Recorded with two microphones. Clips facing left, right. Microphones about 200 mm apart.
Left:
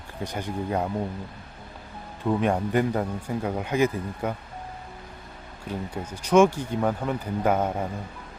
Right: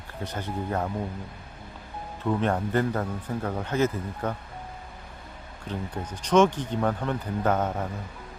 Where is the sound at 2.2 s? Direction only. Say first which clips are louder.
Left 2 dB; 15° left (ahead or behind).